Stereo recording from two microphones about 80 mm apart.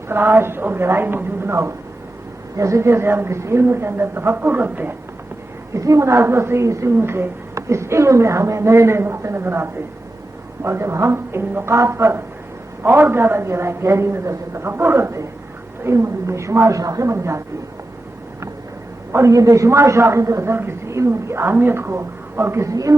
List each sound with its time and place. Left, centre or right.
0.1 s a woman's voice: right
5.7 s a man's voice: right
19.1 s a man's voice: right